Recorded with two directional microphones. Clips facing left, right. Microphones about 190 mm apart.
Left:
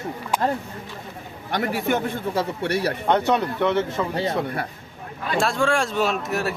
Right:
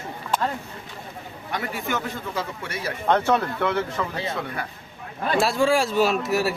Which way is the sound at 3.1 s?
15° left (ahead or behind).